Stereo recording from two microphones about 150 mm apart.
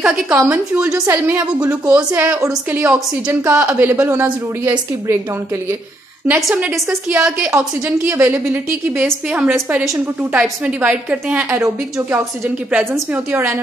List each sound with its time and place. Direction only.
0.3 s a woman's voice: 15° right (ahead or behind)
6.5 s a woman's voice: 10° right (ahead or behind)